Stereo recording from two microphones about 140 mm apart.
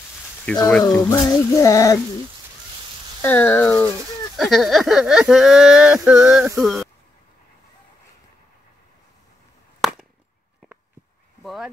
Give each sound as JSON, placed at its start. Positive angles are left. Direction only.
{"t": 0.7, "sound": "speech", "side_deg": 10}
{"t": 1.1, "sound": "music", "side_deg": 25}
{"t": 3.2, "sound": "speech", "side_deg": 15}
{"t": 4.4, "sound": "speech", "side_deg": 0}
{"t": 9.8, "sound": "chop", "side_deg": -5}
{"t": 11.4, "sound": "speech", "side_deg": 0}